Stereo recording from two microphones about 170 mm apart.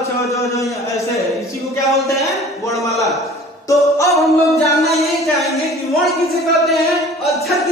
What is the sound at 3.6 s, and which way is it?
Speech, 20° left (ahead or behind).